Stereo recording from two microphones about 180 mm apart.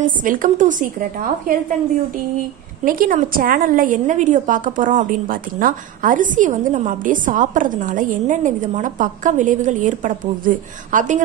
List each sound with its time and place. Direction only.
0.2 s a woman's voice: 45° right (ahead or behind)
2.8 s a woman's voice: 50° right (ahead or behind)